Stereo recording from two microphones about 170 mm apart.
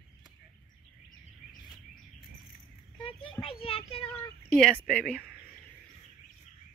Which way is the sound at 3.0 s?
30° left (ahead or behind).